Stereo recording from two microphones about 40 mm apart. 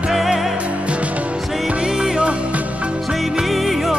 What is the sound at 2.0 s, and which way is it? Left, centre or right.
Music, right.